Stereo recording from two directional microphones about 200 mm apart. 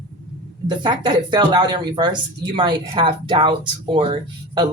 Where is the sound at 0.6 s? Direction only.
20° right (ahead or behind).